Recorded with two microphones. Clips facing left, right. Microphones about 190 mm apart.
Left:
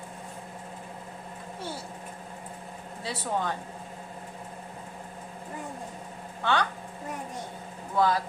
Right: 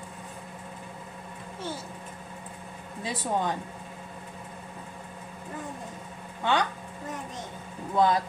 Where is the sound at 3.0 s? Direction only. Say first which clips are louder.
Right 2 dB; 15° right (ahead or behind).